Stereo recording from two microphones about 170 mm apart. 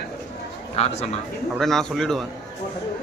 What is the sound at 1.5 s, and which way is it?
Speech, centre (ahead or behind).